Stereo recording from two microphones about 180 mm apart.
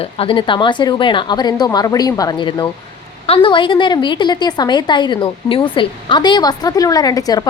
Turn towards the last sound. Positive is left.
turn(degrees=20)  # may be behind; listen again after turning